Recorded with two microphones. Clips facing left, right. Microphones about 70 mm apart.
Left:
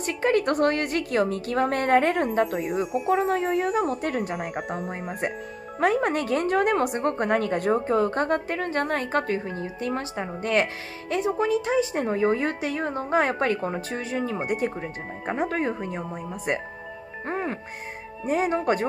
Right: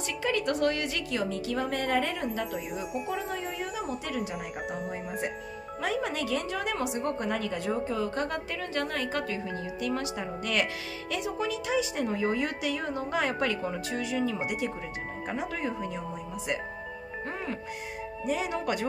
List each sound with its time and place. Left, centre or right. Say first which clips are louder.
0.0 s a woman's voice: left 7 dB; left
17.3 s music: left 7 dB; left
18.2 s speech: left 7 dB; left